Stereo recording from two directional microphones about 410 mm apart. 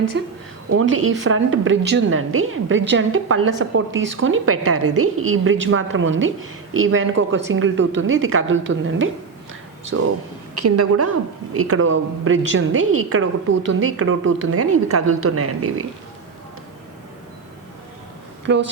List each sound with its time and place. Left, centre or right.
0.1 s a woman's voice: right
18.4 s a woman's voice: right